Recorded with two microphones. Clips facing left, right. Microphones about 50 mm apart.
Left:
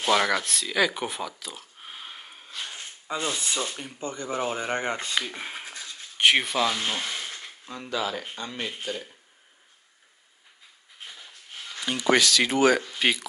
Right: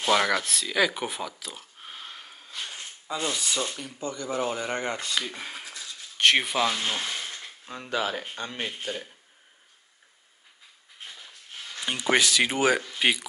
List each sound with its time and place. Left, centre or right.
0.0 s speech: centre
3.3 s speech: left
6.3 s speech: centre
7.9 s speech: right
11.8 s speech: centre